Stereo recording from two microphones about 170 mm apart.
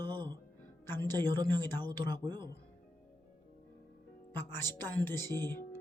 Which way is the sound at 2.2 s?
25° right (ahead or behind).